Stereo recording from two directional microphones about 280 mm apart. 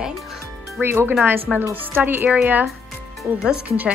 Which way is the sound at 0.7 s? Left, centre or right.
Centre.